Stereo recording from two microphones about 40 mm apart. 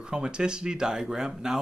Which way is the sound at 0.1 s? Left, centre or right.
Right.